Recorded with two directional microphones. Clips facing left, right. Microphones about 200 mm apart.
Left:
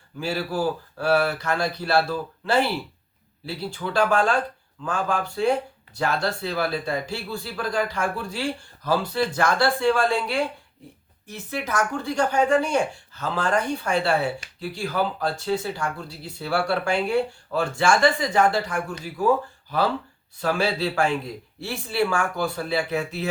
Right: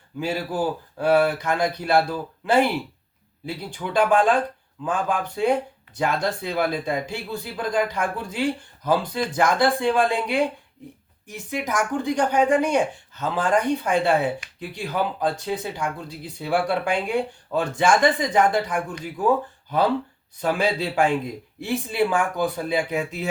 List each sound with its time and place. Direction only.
0.2 s speech: 20° right (ahead or behind)